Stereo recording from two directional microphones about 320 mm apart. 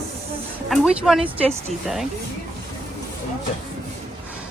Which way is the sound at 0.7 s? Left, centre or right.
Centre.